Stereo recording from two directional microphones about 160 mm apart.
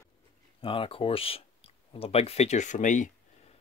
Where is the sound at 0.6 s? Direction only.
35° left (ahead or behind); by 3.1 s 50° left (ahead or behind).